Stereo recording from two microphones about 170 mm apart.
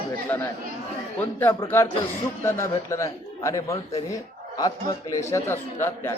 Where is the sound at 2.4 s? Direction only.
15° left (ahead or behind).